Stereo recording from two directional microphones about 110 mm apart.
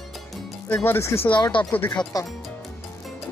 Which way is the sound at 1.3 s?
45° left (ahead or behind).